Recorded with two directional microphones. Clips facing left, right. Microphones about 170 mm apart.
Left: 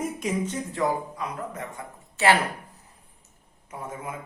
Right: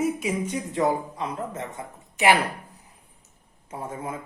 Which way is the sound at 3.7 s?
30° right (ahead or behind).